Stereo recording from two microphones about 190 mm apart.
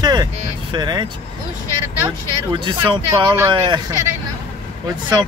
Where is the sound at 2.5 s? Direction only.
25° right (ahead or behind).